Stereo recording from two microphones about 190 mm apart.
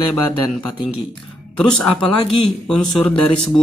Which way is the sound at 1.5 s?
5° left (ahead or behind).